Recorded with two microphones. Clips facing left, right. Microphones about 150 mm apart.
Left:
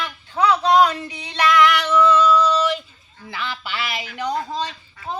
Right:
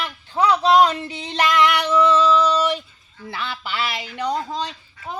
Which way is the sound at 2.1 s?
25° right (ahead or behind).